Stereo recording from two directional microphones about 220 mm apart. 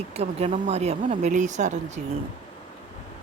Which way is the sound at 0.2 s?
30° right (ahead or behind).